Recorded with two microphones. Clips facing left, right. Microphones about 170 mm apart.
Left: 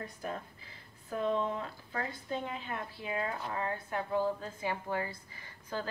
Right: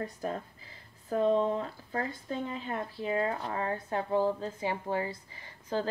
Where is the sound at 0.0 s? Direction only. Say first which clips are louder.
Right 5 dB; 35° right (ahead or behind).